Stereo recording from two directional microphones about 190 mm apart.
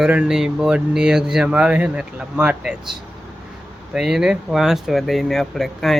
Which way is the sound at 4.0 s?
Centre (ahead or behind).